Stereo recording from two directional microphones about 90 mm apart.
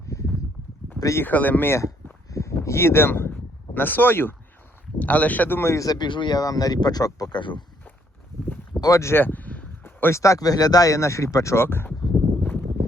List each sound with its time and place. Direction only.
0.0 s a sound: 35° left (ahead or behind)
1.2 s speech: 20° left (ahead or behind); by 6.1 s 45° left (ahead or behind)
6.1 s speech: 60° left (ahead or behind)
6.4 s speech: 45° left (ahead or behind)
7.3 s speech: 60° left (ahead or behind)
8.3 s a sound: 45° right (ahead or behind)
8.8 s speech: 35° left (ahead or behind)